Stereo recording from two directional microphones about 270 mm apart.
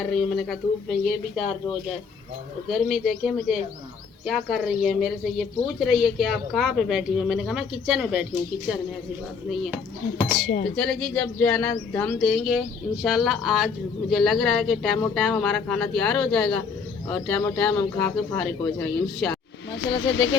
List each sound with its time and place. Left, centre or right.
0.0 s a woman's voice: centre
2.6 s a woman's voice: centre
10.8 s a woman's voice: centre
20.0 s speech: left